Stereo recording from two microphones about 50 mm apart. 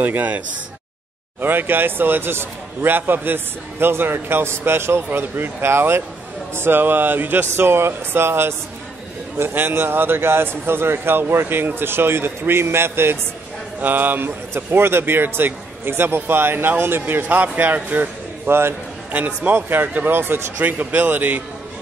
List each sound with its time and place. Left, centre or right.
0.0 s speech: right
1.4 s a man's voice: right
7.5 s a man's voice: right
13.7 s a man's voice: right
17.0 s speech: right
18.5 s speech: right
19.1 s speech: right
19.5 s a man's voice: right